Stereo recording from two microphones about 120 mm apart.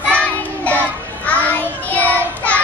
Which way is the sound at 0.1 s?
10° left (ahead or behind).